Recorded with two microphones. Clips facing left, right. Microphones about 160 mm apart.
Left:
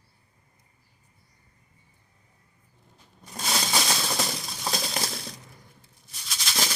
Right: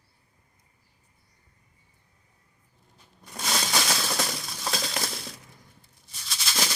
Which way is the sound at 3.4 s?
15° left (ahead or behind).